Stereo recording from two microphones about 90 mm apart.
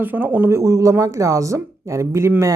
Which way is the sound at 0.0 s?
20° right (ahead or behind).